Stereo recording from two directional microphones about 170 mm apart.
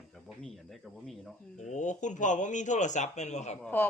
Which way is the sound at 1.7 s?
45° left (ahead or behind).